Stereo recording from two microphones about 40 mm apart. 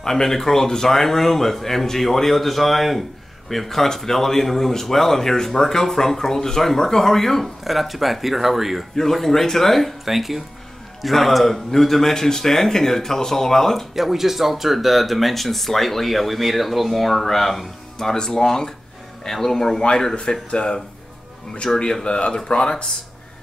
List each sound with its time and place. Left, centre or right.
0.0 s speech: centre
8.9 s speech: centre
10.0 s speech: centre
13.9 s speech: centre
20.2 s speech: left